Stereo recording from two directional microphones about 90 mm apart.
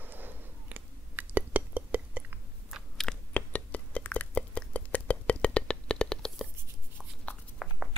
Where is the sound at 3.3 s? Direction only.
15° left (ahead or behind).